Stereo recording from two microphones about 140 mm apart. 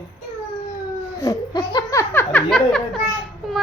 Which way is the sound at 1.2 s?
25° left (ahead or behind).